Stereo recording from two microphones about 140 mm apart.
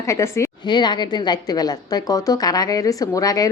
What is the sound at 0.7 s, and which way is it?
A woman's voice, 30° left (ahead or behind).